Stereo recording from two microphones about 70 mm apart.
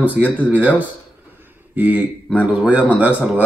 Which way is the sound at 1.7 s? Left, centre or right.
Right.